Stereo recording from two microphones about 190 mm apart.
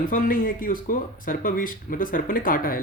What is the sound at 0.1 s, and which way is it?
Speech, 45° left (ahead or behind).